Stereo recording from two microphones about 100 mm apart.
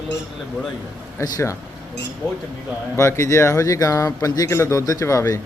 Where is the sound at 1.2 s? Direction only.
30° left (ahead or behind).